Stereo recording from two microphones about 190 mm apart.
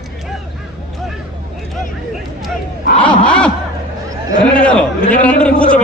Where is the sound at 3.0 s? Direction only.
25° left (ahead or behind).